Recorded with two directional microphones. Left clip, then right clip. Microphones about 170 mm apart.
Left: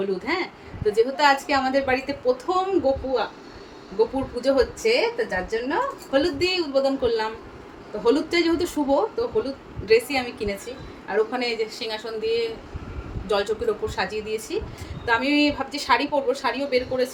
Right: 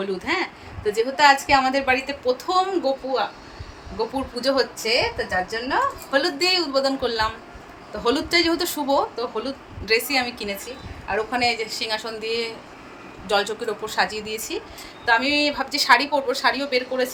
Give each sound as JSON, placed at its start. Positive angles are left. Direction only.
{"t": 0.3, "sound": "a woman's voice", "side_deg": -20}
{"t": 0.9, "sound": "a woman's voice", "side_deg": -40}
{"t": 1.9, "sound": "a woman's voice", "side_deg": -5}
{"t": 11.3, "sound": "a woman's voice", "side_deg": -15}